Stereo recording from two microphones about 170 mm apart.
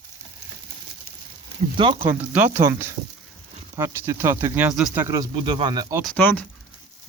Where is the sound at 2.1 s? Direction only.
10° right (ahead or behind).